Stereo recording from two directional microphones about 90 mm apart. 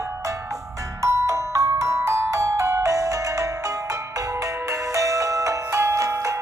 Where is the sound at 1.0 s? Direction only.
35° right (ahead or behind).